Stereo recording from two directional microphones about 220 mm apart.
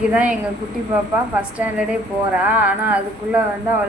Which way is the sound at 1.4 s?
5° right (ahead or behind).